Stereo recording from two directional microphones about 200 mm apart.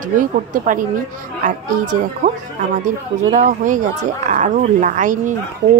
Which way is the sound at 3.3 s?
40° right (ahead or behind).